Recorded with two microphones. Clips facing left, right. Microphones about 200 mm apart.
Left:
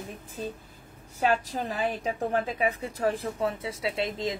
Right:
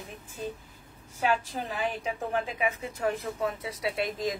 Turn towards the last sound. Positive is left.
turn(degrees=25)  # may be behind; listen again after turning